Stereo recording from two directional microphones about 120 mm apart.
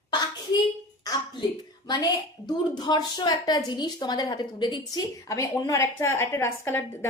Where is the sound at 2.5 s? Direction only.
35° left (ahead or behind).